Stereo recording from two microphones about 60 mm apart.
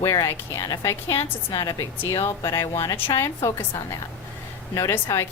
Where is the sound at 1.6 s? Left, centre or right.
Left.